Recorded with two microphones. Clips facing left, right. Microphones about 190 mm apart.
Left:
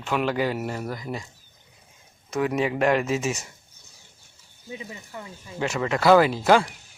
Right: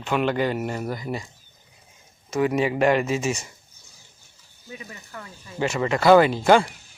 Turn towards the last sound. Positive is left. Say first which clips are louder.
# right 2 dB
turn(degrees=0)  # may be behind; listen again after turning